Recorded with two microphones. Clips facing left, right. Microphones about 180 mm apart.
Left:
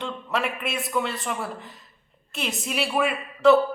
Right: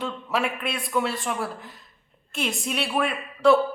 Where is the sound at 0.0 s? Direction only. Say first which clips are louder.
Right 1 dB; centre (ahead or behind).